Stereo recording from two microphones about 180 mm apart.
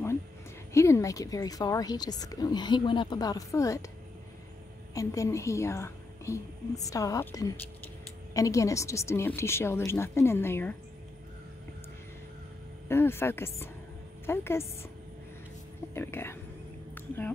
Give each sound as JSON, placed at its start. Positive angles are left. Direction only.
{"t": 0.7, "sound": "a woman's voice", "side_deg": 15}
{"t": 4.9, "sound": "a woman's voice", "side_deg": 15}
{"t": 12.8, "sound": "a woman's voice", "side_deg": 15}
{"t": 15.9, "sound": "a woman's voice", "side_deg": 15}